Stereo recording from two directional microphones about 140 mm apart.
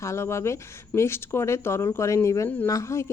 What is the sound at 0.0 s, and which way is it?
A woman's voice, 20° left (ahead or behind).